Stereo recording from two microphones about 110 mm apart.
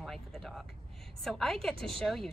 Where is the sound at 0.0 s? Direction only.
Centre (ahead or behind).